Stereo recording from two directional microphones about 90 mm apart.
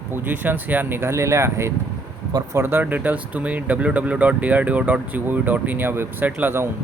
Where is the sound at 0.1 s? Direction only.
20° right (ahead or behind).